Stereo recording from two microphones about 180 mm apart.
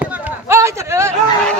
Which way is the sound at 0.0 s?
10° right (ahead or behind).